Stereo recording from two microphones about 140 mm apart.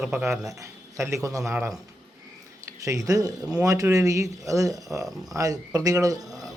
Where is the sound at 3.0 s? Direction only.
25° right (ahead or behind).